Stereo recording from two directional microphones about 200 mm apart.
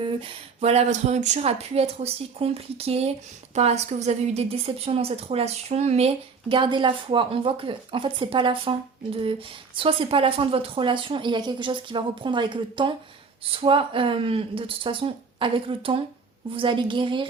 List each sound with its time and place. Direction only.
0.2 s speech: 30° right (ahead or behind)
9.7 s speech: 25° right (ahead or behind)